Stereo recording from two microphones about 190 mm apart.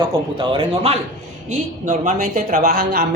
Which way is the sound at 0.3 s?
30° right (ahead or behind).